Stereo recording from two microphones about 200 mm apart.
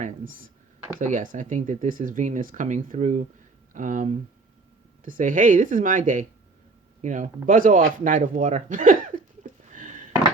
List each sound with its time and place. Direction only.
0.0 s speech: 45° right (ahead or behind)